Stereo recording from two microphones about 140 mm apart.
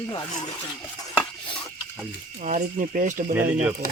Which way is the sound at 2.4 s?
65° right (ahead or behind).